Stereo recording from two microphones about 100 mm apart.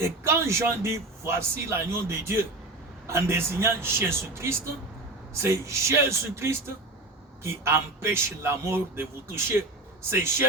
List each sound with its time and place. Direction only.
0.0 s speech: 25° right (ahead or behind)